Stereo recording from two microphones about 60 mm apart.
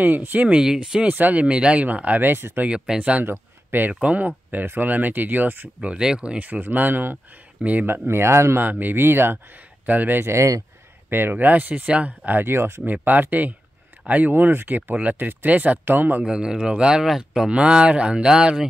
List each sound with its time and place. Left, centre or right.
0.0 s speech: right
0.5 s speech: centre
1.0 s speech: right
3.0 s speech: right
3.3 s speech: right
5.8 s speech: centre
8.1 s speech: right
8.5 s speech: right
10.2 s speech: right
11.1 s speech: right
12.4 s speech: right
12.8 s speech: right
16.3 s speech: centre